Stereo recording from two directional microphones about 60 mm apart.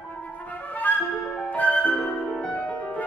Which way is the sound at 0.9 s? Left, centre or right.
Left.